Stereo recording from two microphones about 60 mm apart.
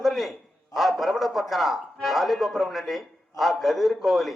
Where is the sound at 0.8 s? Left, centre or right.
Centre.